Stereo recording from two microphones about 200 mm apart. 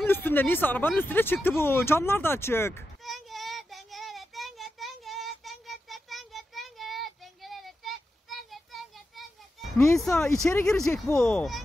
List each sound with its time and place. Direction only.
0.0 s speech: 10° left (ahead or behind)
3.0 s child singing: centre (ahead or behind)
9.9 s speech: 5° left (ahead or behind)
10.8 s speech: 15° left (ahead or behind)
11.1 s speech: 5° left (ahead or behind)